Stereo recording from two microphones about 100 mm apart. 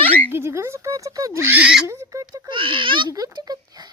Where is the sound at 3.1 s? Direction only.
40° right (ahead or behind).